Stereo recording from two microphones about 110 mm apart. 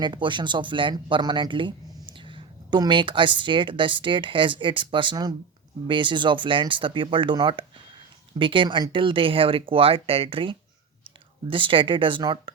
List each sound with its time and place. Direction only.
0.0 s speech: 45° right (ahead or behind)